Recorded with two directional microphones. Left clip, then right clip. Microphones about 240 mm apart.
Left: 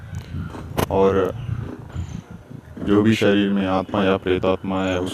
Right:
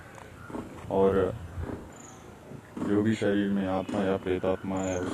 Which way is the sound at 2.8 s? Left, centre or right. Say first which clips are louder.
Left 10 dB; left.